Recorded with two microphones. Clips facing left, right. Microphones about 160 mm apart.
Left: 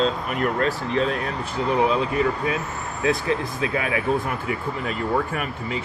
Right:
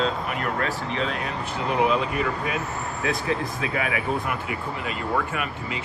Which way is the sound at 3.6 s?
30° left (ahead or behind).